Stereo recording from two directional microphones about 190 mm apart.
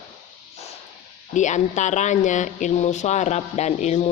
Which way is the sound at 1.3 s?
40° left (ahead or behind).